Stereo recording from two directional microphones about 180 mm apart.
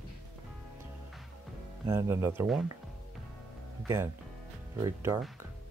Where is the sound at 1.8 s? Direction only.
15° right (ahead or behind).